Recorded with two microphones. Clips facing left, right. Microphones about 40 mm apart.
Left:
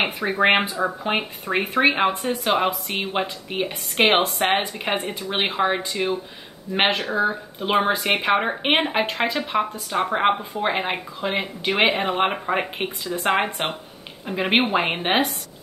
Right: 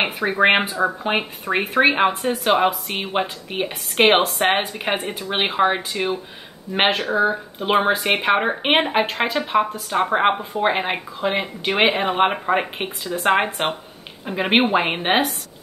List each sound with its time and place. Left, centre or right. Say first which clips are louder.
0.0 s speech: right 2 dB; centre